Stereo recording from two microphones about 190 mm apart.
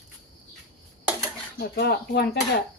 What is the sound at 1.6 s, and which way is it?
Speech, 55° left (ahead or behind).